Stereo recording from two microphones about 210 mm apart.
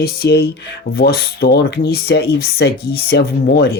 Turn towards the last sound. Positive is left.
turn(degrees=50)  # may be behind; listen again after turning